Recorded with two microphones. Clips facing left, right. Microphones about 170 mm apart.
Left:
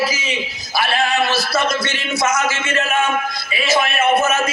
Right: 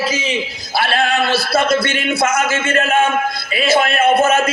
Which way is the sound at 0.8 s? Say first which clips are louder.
Right 1 dB; 60° right (ahead or behind).